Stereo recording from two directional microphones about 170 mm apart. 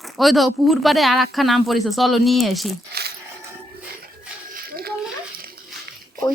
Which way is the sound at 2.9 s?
70° right (ahead or behind).